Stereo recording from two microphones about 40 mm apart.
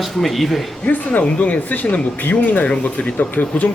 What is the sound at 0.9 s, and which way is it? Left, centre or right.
Speech, left.